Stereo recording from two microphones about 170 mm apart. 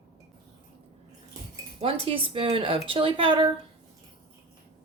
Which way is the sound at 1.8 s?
35° right (ahead or behind).